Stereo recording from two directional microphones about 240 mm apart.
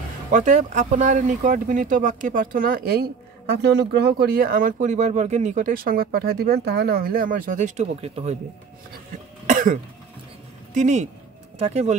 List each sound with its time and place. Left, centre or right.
0.3 s speech: right
9.5 s speech: right